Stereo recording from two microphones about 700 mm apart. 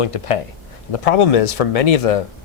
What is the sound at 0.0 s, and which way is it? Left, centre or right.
Speech, left.